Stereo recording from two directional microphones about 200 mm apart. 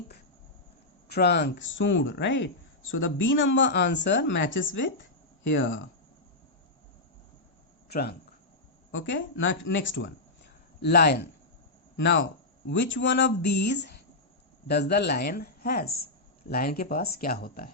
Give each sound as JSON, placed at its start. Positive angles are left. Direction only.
{"t": 1.0, "sound": "speech", "side_deg": 55}
{"t": 2.9, "sound": "a woman's voice", "side_deg": 80}
{"t": 7.9, "sound": "speech", "side_deg": 50}
{"t": 8.9, "sound": "a woman's voice", "side_deg": 70}
{"t": 10.8, "sound": "speech", "side_deg": 50}
{"t": 11.9, "sound": "speech", "side_deg": 65}